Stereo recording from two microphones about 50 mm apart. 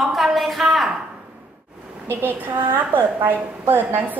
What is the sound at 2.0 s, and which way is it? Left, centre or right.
A woman's voice, right.